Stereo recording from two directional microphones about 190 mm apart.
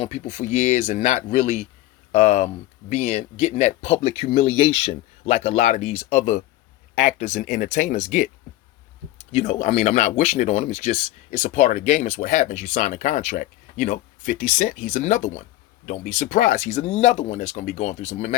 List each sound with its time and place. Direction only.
0.0 s speech: 35° left (ahead or behind)
9.3 s speech: 35° left (ahead or behind)